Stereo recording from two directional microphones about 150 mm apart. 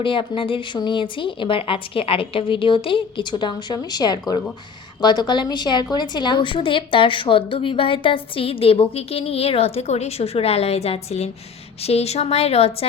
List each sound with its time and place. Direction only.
0.0 s a woman's voice: 35° left (ahead or behind)